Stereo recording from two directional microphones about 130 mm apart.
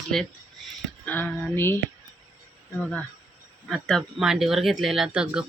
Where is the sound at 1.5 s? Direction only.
20° left (ahead or behind).